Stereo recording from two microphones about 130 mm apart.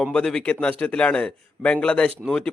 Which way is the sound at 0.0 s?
5° left (ahead or behind).